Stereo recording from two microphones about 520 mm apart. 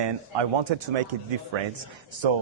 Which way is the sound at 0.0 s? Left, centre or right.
Right.